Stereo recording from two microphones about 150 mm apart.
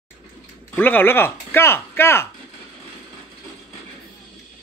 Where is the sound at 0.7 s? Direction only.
15° left (ahead or behind).